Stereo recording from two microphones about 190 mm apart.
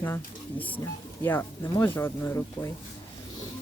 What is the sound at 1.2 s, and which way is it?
Speech, 10° left (ahead or behind).